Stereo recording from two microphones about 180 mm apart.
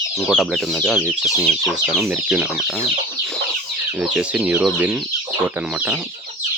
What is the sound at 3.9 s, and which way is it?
Speech, 5° right (ahead or behind).